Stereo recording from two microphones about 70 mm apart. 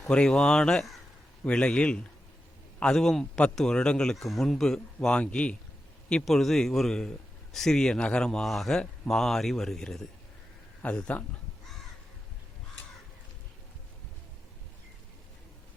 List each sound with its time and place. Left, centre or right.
0.0 s a man's voice: centre
4.9 s a man's voice: centre
6.2 s a man's voice: centre